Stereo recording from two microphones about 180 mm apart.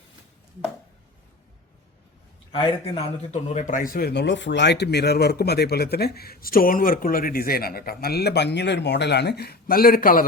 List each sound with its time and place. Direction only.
2.5 s a man's voice: 30° left (ahead or behind); by 10.2 s 50° left (ahead or behind)